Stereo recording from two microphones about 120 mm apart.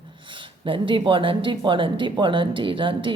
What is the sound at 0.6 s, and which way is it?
Speech, 45° right (ahead or behind).